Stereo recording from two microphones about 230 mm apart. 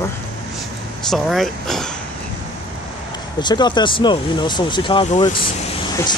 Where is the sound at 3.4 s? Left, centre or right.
Centre.